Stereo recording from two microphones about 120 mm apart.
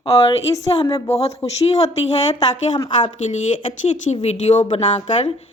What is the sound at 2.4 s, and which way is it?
Speech, 40° left (ahead or behind).